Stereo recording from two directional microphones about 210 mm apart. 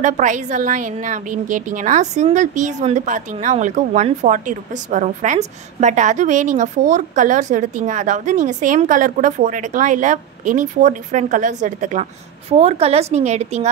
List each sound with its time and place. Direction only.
0.0 s a woman's voice: 35° right (ahead or behind)